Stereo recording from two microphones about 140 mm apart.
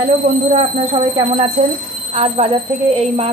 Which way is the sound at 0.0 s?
45° right (ahead or behind).